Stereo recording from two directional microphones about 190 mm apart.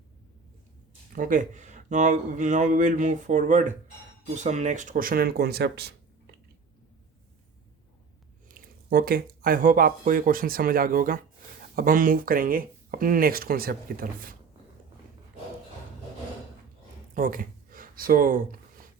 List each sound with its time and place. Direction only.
1.1 s speech: 45° right (ahead or behind)
8.4 s speech: 50° right (ahead or behind)
17.2 s speech: 50° right (ahead or behind)